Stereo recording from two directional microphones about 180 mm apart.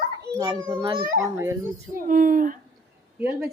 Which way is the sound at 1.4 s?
15° right (ahead or behind).